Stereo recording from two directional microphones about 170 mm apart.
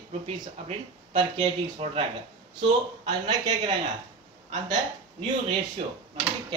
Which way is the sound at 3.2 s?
25° right (ahead or behind).